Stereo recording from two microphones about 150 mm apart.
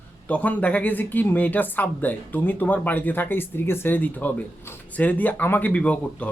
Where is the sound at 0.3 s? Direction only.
10° left (ahead or behind).